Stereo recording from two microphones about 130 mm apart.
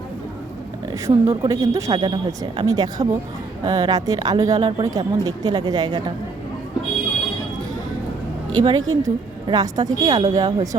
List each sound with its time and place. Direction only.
1.0 s speech: 25° right (ahead or behind)
8.6 s a woman's voice: 30° right (ahead or behind)